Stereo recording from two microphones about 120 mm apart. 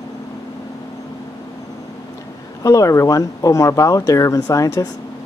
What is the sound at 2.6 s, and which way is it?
Speech, 25° left (ahead or behind).